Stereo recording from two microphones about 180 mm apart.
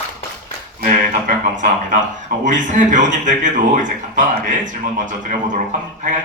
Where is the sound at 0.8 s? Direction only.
45° right (ahead or behind).